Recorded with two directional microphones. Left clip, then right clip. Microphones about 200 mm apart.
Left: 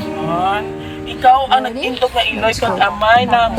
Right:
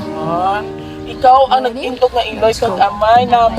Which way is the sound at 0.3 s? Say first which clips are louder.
Right 1 dB; 50° right (ahead or behind).